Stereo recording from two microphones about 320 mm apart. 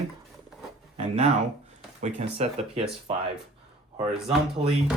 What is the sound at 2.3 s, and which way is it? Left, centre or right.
Speech, centre.